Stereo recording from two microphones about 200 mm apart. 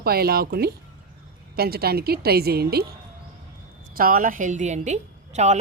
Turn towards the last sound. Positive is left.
turn(degrees=-35)  # may be behind; listen again after turning